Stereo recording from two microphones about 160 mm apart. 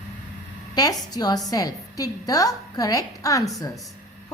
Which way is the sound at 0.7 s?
25° left (ahead or behind).